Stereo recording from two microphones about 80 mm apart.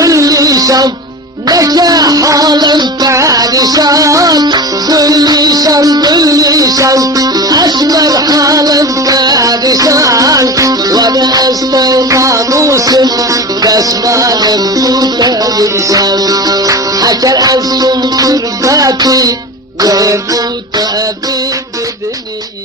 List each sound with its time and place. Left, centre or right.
0.0 s music: right
3.1 s music: right